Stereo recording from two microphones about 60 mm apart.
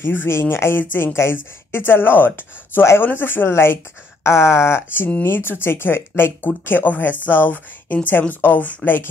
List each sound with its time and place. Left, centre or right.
0.0 s speech: left
1.1 s speech: left
1.9 s speech: left